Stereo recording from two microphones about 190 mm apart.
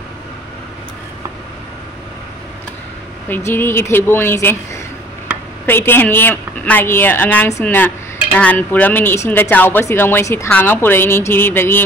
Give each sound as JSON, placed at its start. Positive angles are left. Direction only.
{"t": 3.3, "sound": "speech", "side_deg": 10}
{"t": 5.7, "sound": "speech", "side_deg": 10}